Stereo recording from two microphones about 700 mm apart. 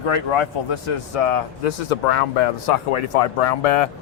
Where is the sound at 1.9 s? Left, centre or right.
Left.